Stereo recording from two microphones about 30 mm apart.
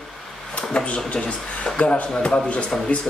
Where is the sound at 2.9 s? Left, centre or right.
Left.